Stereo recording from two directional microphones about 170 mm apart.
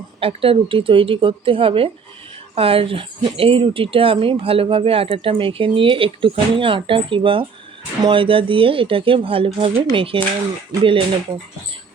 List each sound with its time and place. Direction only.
0.2 s speech: 35° right (ahead or behind)